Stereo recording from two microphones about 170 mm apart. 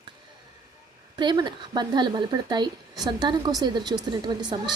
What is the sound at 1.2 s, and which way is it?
A woman's voice, 25° right (ahead or behind).